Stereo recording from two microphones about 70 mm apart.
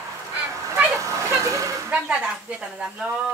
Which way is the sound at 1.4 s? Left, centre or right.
Right.